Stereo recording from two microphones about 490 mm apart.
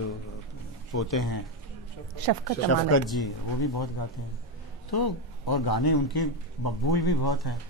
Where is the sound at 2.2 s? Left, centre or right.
Right.